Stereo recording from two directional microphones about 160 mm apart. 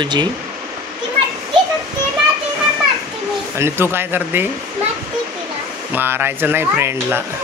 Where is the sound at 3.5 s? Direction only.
15° right (ahead or behind).